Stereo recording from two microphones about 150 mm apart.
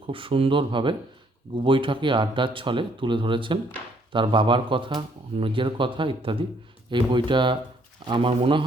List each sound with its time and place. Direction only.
0.1 s speech: 35° right (ahead or behind)